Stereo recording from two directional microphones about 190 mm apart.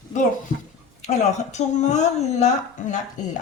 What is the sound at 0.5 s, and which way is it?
Speech, 45° left (ahead or behind).